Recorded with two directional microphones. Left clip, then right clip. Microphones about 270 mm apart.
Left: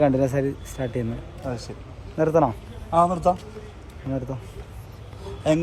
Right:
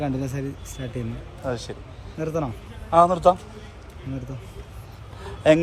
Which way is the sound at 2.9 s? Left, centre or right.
Right.